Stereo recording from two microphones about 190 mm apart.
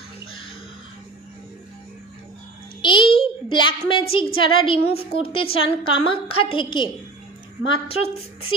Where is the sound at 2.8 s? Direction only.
25° left (ahead or behind).